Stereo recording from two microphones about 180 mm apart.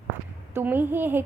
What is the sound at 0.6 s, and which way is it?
Speech, 10° right (ahead or behind).